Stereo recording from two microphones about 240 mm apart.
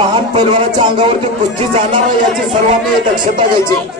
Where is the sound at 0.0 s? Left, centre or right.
Right.